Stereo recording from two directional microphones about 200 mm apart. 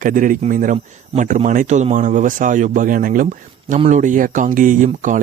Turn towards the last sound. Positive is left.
turn(degrees=-40)  # may be behind; listen again after turning